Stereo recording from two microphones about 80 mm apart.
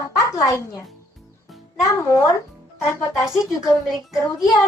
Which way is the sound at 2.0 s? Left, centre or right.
Left.